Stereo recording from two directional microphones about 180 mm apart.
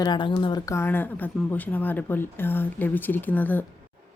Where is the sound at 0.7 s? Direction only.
10° left (ahead or behind).